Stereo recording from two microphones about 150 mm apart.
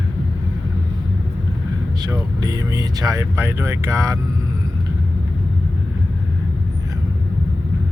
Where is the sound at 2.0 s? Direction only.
25° right (ahead or behind).